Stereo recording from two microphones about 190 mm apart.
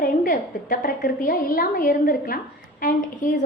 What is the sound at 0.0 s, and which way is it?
A woman's voice, 50° left (ahead or behind).